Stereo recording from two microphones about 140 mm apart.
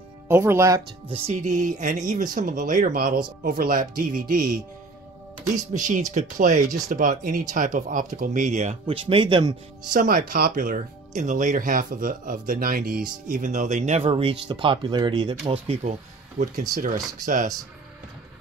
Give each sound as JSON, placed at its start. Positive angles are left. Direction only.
{"t": 0.3, "sound": "speech", "side_deg": -20}
{"t": 1.0, "sound": "speech", "side_deg": -45}
{"t": 5.7, "sound": "speech", "side_deg": -65}
{"t": 8.8, "sound": "speech", "side_deg": -40}
{"t": 9.9, "sound": "speech", "side_deg": -90}
{"t": 13.4, "sound": "speech", "side_deg": -60}